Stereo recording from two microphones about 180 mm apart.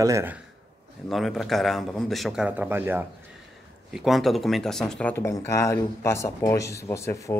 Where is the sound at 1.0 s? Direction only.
Centre (ahead or behind).